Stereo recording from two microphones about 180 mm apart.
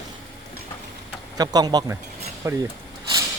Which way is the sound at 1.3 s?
20° right (ahead or behind).